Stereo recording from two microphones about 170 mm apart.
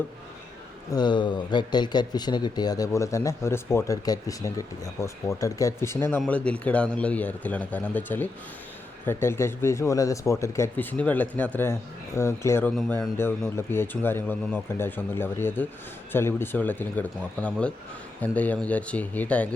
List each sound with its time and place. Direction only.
0.9 s speech: 25° left (ahead or behind); by 19.5 s 10° left (ahead or behind)